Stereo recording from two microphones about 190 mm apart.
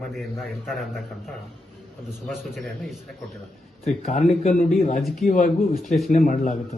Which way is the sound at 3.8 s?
35° left (ahead or behind).